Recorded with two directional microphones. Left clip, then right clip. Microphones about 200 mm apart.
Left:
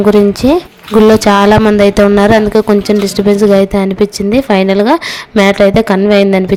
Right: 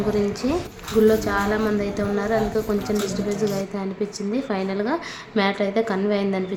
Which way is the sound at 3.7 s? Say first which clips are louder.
Left 16 dB; 45° left (ahead or behind).